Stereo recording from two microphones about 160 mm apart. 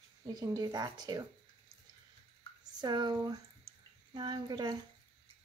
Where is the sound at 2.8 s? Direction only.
25° right (ahead or behind).